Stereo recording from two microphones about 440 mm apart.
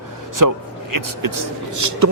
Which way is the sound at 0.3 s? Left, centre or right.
Right.